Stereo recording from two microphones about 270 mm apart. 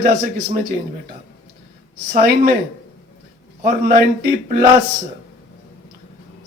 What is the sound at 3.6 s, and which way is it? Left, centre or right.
Speech, right.